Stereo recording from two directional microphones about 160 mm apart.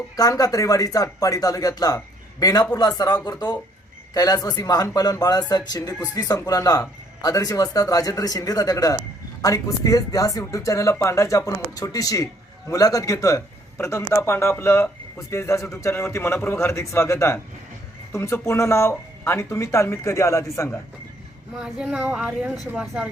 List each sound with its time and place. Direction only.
0.2 s speech: 25° left (ahead or behind)
21.5 s speech: 5° right (ahead or behind)